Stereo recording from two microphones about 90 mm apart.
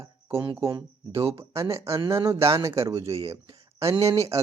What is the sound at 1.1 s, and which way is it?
Speech, 90° right.